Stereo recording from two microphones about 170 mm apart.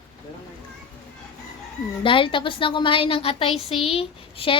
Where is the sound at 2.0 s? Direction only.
30° left (ahead or behind).